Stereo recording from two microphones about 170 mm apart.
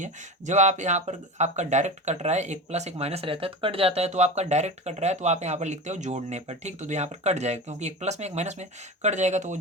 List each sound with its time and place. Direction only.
0.0 s speech: 45° right (ahead or behind)